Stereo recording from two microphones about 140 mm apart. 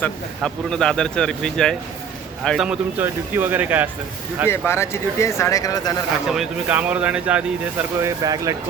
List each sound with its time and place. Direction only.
0.0 s speech: 5° left (ahead or behind)
3.0 s speech: 15° right (ahead or behind)
4.4 s speech: 20° left (ahead or behind)
6.2 s speech: 5° right (ahead or behind)
8.2 s speech: 25° right (ahead or behind)